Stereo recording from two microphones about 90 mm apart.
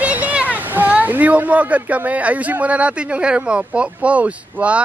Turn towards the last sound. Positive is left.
turn(degrees=-15)  # may be behind; listen again after turning